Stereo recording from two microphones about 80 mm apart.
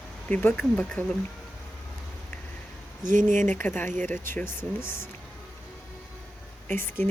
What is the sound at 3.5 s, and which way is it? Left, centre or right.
Speech, left.